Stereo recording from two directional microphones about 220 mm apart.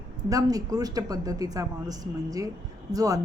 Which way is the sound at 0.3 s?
15° right (ahead or behind).